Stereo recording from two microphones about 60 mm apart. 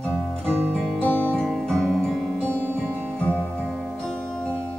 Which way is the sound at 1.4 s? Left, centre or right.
Centre.